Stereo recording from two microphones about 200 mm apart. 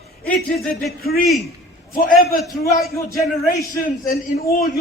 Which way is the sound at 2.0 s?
45° left (ahead or behind).